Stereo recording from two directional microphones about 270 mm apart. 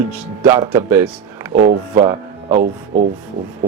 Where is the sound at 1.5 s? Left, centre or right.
Right.